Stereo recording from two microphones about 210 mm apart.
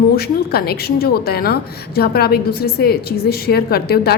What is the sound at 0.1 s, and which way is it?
A woman's voice, 50° left (ahead or behind).